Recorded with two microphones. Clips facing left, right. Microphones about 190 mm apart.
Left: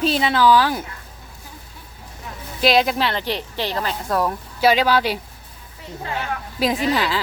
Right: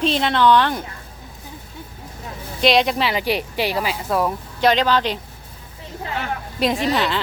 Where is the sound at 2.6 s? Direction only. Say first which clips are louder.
Even; centre (ahead or behind).